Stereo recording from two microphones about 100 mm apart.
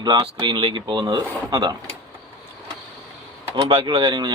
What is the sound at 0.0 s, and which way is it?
Speech, 45° right (ahead or behind).